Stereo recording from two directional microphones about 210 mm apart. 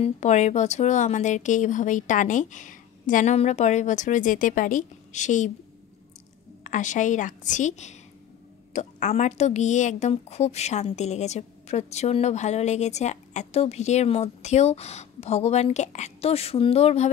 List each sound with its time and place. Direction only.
0.0 s a woman's voice: 35° left (ahead or behind)
6.6 s a woman's voice: 35° left (ahead or behind)